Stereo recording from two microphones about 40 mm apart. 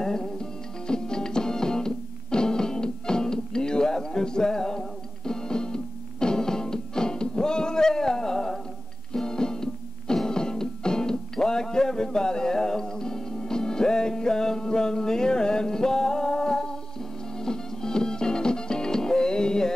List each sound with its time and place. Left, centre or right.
0.0 s music: centre